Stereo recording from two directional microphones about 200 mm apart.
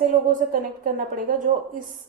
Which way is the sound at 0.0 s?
40° right (ahead or behind).